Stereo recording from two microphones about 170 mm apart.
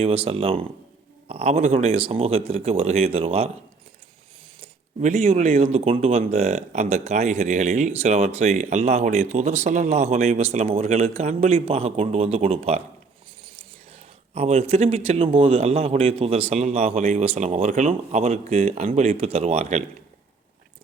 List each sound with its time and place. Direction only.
0.0 s speech: 35° right (ahead or behind)
4.6 s speech: 40° right (ahead or behind)